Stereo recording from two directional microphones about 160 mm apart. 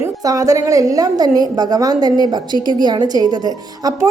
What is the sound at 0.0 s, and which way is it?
A woman's voice, 20° right (ahead or behind).